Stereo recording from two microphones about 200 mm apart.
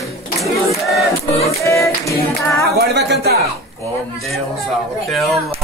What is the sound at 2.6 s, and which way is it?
Speech, 55° right (ahead or behind).